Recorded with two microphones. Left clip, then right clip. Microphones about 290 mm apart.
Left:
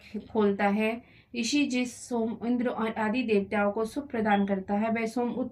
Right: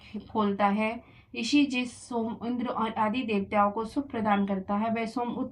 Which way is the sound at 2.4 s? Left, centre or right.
Centre.